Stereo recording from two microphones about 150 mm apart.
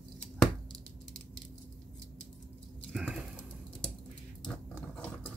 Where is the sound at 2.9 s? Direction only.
5° right (ahead or behind).